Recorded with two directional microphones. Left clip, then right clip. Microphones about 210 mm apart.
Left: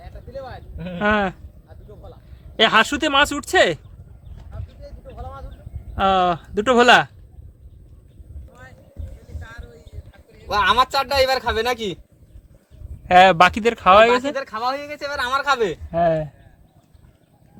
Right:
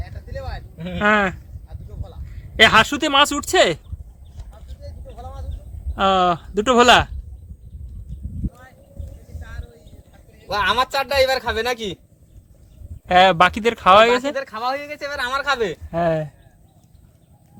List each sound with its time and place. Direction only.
0.0 s vehicle: centre (ahead or behind)
0.9 s speech: centre (ahead or behind)
2.6 s speech: 5° right (ahead or behind)
5.0 s a sound: 5° right (ahead or behind)
9.4 s a sound: 20° left (ahead or behind)
10.5 s speech: 5° left (ahead or behind)
13.1 s speech: 5° left (ahead or behind)
15.9 s speech: 10° right (ahead or behind)